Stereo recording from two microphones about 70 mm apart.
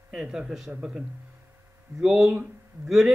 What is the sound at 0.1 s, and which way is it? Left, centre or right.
A woman's voice, centre.